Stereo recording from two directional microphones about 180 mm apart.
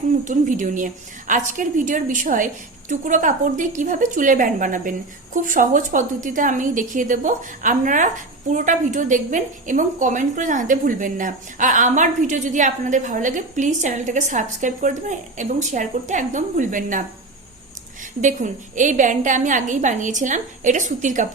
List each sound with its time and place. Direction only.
0.3 s a woman's voice: 45° right (ahead or behind)
18.2 s a woman's voice: 45° right (ahead or behind)